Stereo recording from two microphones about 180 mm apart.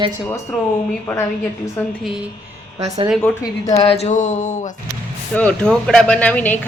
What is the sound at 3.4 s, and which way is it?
Speech, 20° left (ahead or behind).